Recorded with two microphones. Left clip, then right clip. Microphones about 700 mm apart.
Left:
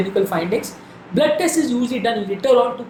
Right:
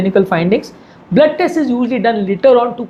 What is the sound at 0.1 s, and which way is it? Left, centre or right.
Speech, right.